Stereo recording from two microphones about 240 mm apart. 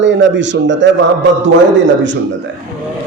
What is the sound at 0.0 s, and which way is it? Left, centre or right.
Speech, right.